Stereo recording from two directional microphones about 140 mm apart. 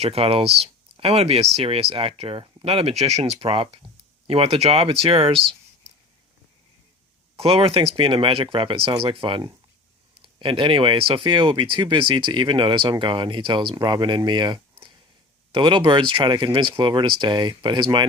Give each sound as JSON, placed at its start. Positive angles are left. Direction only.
{"t": 0.0, "sound": "speech", "side_deg": -45}
{"t": 7.3, "sound": "speech", "side_deg": -40}